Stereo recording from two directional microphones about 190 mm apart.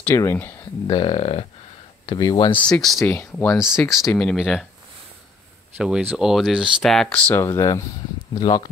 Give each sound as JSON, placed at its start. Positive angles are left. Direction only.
{"t": 0.0, "sound": "speech", "side_deg": 15}
{"t": 0.8, "sound": "speech", "side_deg": 30}
{"t": 2.6, "sound": "speech", "side_deg": 0}
{"t": 3.7, "sound": "speech", "side_deg": 15}
{"t": 5.8, "sound": "speech", "side_deg": -5}